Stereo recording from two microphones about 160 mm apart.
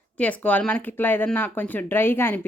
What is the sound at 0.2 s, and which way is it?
Speech, 10° left (ahead or behind).